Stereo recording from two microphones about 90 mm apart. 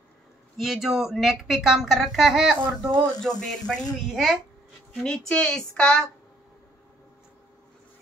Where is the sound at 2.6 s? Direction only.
50° right (ahead or behind).